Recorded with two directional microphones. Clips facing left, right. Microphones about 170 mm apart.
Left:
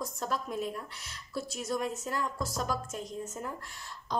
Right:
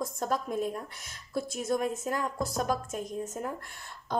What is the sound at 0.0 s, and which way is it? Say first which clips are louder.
A woman's voice: right 4 dB; 50° right (ahead or behind).